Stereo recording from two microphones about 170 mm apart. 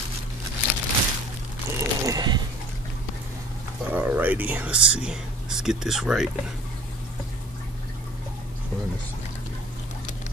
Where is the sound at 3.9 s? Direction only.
10° right (ahead or behind).